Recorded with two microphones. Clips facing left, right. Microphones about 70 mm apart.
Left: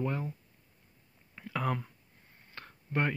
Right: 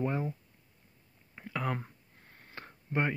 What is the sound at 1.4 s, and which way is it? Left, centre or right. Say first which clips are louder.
Speech: left 1 dB; centre.